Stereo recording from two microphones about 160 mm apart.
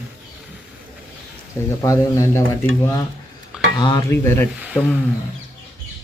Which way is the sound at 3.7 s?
25° left (ahead or behind).